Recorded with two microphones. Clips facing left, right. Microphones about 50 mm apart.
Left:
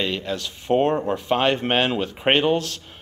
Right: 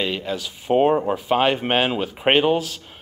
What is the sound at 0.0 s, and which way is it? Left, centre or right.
Speech, centre.